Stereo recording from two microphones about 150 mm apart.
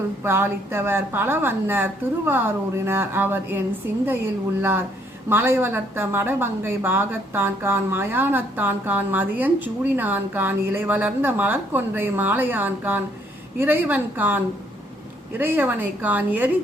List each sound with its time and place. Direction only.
0.3 s speech: 15° right (ahead or behind)